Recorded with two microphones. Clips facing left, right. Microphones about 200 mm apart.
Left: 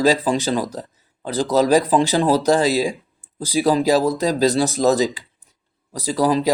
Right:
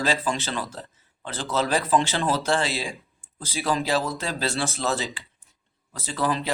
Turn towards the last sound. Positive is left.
turn(degrees=40)  # may be behind; listen again after turning